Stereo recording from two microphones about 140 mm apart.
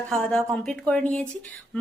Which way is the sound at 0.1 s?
5° left (ahead or behind).